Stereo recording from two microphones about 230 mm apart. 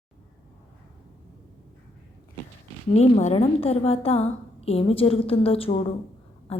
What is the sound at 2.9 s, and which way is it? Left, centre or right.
A woman's voice, left.